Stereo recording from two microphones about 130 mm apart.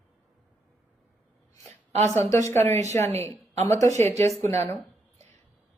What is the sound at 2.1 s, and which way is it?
Speech, 20° left (ahead or behind).